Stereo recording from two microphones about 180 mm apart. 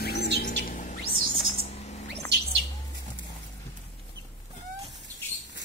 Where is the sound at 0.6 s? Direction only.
45° left (ahead or behind).